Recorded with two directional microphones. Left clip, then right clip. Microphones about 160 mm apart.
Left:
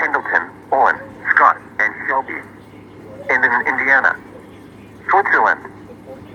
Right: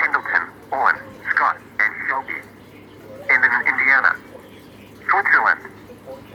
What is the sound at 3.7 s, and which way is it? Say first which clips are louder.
Speech: left 1 dB; 45° left (ahead or behind).